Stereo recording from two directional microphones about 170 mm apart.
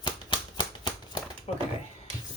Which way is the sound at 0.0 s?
25° left (ahead or behind).